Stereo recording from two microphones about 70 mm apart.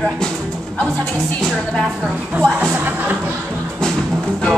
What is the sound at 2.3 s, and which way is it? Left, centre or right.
Music, right.